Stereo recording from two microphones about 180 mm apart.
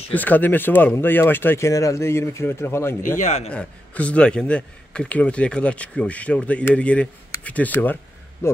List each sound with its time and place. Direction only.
0.1 s speech: 10° left (ahead or behind)
3.2 s speech: 40° left (ahead or behind)
3.4 s speech: 5° left (ahead or behind)